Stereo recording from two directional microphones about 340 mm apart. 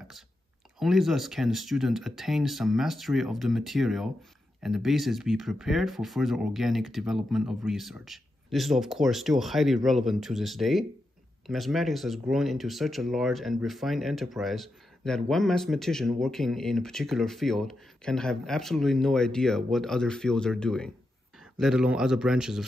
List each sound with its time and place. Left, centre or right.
0.7 s speech: centre